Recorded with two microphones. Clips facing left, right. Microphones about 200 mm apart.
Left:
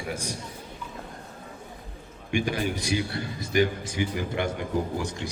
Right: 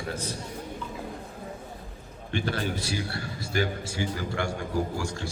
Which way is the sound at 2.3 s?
15° left (ahead or behind).